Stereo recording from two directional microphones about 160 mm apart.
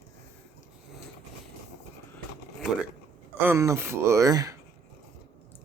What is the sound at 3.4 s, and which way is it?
Speech, 20° right (ahead or behind).